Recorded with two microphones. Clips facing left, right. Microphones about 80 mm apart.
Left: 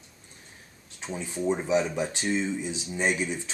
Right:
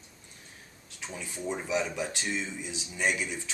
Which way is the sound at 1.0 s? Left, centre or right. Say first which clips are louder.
Left 7 dB; left.